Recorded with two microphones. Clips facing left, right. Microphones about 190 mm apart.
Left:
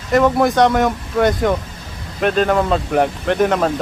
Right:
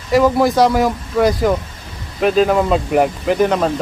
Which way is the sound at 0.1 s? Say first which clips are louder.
Right 1 dB; centre (ahead or behind).